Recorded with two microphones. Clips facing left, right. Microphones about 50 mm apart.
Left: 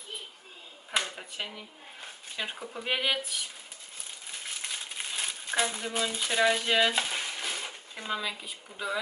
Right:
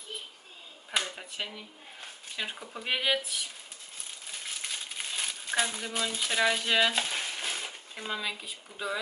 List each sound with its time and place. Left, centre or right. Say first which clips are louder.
0.9 s speech: left 1 dB; centre
4.6 s crumpling: left 1 dB; centre